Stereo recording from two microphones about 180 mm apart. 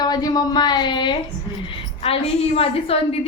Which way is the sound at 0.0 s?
20° left (ahead or behind).